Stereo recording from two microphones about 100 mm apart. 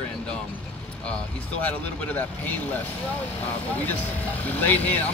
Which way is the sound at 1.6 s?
15° left (ahead or behind).